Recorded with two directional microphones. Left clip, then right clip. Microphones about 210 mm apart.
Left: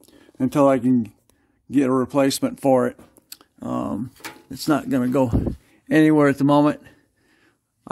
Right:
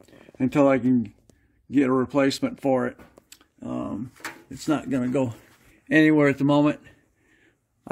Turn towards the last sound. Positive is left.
turn(degrees=30)  # may be behind; listen again after turning